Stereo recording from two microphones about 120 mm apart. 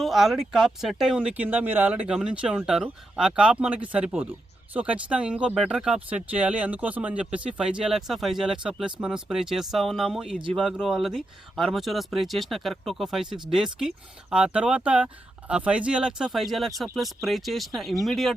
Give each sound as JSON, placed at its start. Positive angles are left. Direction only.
{"t": 0.0, "sound": "speech", "side_deg": 0}